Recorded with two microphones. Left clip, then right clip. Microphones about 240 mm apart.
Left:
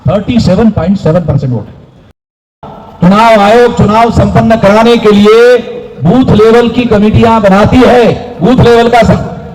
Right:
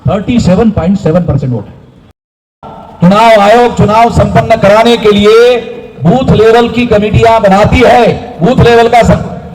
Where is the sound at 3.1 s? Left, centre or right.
Right.